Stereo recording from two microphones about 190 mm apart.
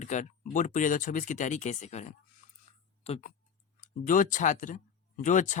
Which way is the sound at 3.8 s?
45° left (ahead or behind).